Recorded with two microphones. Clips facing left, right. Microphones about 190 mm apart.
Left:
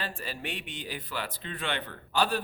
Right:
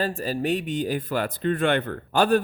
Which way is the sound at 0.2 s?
40° right (ahead or behind).